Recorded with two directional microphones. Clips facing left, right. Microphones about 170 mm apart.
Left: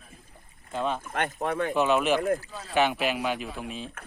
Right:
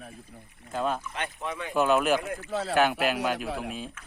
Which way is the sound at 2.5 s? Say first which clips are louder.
Right 11 dB; 80° right.